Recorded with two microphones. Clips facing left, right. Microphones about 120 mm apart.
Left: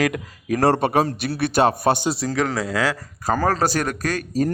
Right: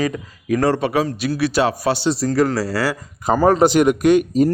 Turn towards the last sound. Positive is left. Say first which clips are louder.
# right 9 dB
turn(degrees=-20)  # may be behind; listen again after turning